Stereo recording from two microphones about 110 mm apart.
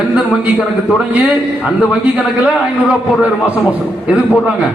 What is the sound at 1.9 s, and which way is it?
A man's voice, 10° right (ahead or behind).